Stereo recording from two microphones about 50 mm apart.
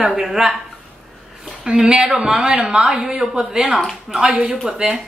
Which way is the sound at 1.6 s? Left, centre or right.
Centre.